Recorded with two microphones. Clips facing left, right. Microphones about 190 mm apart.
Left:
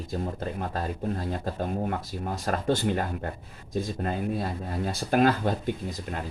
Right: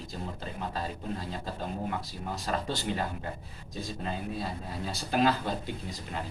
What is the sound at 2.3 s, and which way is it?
Speech, 50° left (ahead or behind).